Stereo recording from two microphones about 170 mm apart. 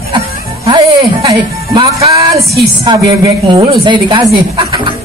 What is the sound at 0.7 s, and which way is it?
Music, 25° right (ahead or behind).